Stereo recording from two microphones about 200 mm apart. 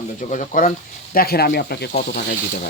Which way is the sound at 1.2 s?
50° left (ahead or behind).